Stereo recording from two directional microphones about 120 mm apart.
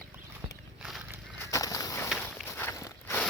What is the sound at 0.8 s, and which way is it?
Walk, centre (ahead or behind).